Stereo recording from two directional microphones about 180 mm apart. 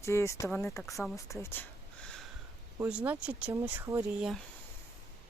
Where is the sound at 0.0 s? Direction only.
15° left (ahead or behind).